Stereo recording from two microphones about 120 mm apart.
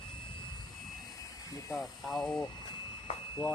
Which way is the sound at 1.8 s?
Centre (ahead or behind).